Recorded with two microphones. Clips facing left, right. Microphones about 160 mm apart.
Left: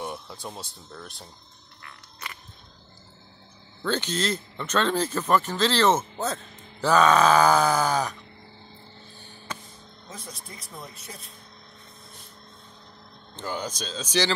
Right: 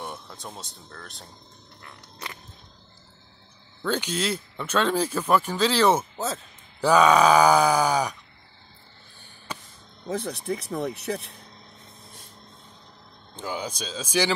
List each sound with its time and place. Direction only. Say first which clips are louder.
0.0 s speech: left 2 dB; centre (ahead or behind)
3.8 s speech: even; 10° right (ahead or behind)
6.8 s speech: right 1 dB; 10° right (ahead or behind)
10.0 s speech: right 14 dB; 65° right (ahead or behind)
13.4 s speech: even; 10° right (ahead or behind)